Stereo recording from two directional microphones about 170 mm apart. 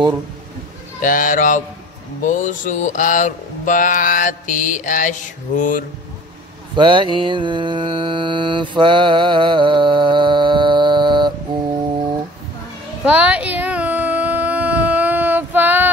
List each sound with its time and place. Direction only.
1.0 s mantra: 50° left (ahead or behind)
6.7 s mantra: 30° right (ahead or behind)
13.0 s a sound: 10° right (ahead or behind)